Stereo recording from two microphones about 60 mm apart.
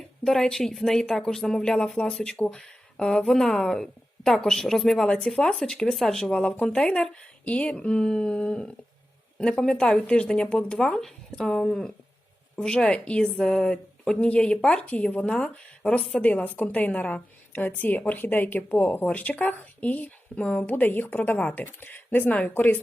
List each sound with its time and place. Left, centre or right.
0.3 s speech: centre
5.0 s speech: centre
6.2 s a woman's voice: centre; by 22.8 s left